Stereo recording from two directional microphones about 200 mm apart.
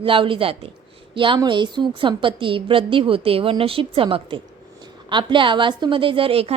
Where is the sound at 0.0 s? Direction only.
25° right (ahead or behind).